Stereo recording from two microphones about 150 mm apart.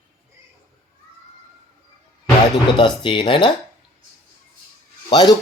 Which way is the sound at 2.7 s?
35° left (ahead or behind).